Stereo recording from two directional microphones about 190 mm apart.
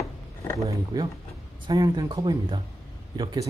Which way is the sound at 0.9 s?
20° right (ahead or behind).